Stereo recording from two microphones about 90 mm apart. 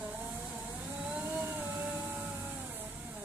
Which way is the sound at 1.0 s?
15° right (ahead or behind).